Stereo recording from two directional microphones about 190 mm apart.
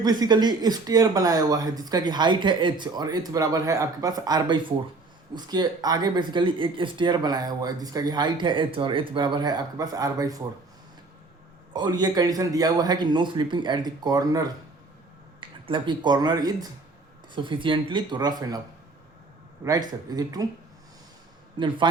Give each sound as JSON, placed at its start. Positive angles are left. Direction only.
{"t": 0.0, "sound": "speech", "side_deg": -20}
{"t": 11.7, "sound": "speech", "side_deg": -20}
{"t": 19.6, "sound": "speech", "side_deg": -20}